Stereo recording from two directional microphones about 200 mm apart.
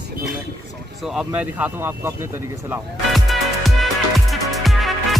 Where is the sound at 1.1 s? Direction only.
5° right (ahead or behind).